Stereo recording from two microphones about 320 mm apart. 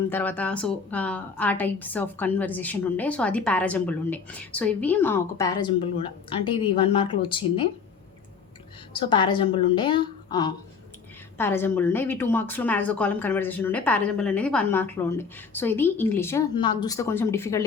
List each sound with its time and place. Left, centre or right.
0.1 s a woman's voice: centre
8.9 s a woman's voice: centre